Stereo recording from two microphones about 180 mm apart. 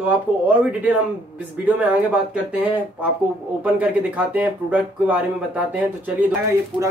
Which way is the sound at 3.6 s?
10° right (ahead or behind).